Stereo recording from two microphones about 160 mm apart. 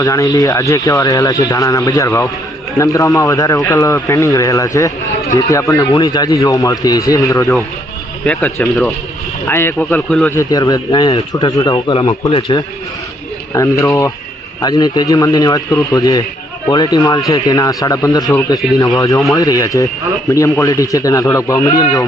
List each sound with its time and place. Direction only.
0.0 s a man's voice: 20° left (ahead or behind)
10.3 s speech: 20° left (ahead or behind)
13.5 s speech: 20° left (ahead or behind)